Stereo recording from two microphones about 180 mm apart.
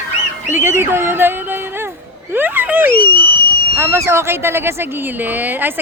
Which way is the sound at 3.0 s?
55° left (ahead or behind).